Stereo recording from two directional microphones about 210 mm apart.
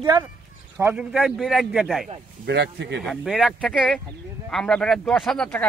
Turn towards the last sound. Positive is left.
turn(degrees=5)  # may be behind; listen again after turning